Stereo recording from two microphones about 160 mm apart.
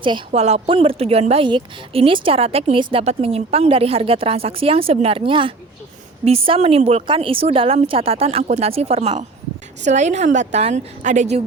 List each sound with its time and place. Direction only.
0.3 s a woman's voice: 40° right (ahead or behind)